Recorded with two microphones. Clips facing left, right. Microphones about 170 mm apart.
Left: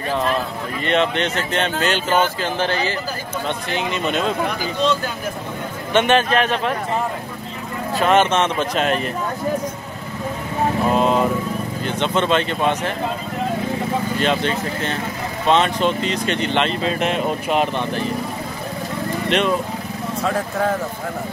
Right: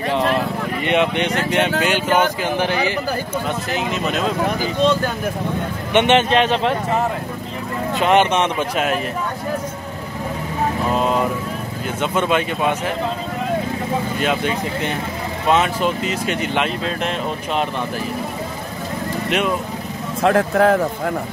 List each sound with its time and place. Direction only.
0.8 s speech: 15° right (ahead or behind)
3.7 s speech: centre (ahead or behind)
5.9 s a man's voice: 20° right (ahead or behind)
8.0 s speech: 15° right (ahead or behind)
10.9 s speech: centre (ahead or behind)
14.2 s speech: 10° right (ahead or behind)
20.2 s speech: 65° right (ahead or behind)